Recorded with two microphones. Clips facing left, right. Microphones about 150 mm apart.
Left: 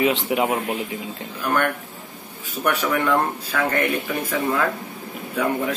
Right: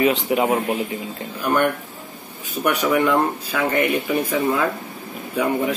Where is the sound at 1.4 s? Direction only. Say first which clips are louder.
Right 3 dB; 15° right (ahead or behind).